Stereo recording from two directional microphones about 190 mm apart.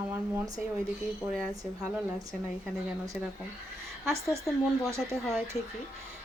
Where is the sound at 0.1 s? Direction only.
15° right (ahead or behind).